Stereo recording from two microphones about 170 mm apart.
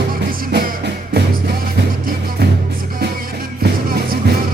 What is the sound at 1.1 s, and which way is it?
Music, 70° right (ahead or behind).